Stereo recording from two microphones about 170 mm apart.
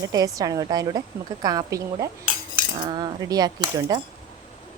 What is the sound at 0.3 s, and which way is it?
Speech, 20° right (ahead or behind).